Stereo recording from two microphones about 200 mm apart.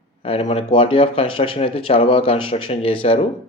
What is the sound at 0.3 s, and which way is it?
Speech, 30° left (ahead or behind).